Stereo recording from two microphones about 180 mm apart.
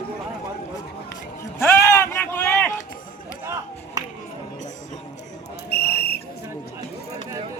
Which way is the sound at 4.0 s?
20° right (ahead or behind).